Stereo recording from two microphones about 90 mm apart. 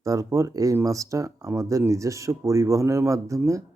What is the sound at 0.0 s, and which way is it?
Speech, 40° right (ahead or behind).